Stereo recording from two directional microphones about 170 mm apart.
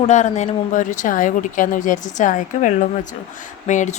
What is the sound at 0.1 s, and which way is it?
A woman's voice, 45° left (ahead or behind).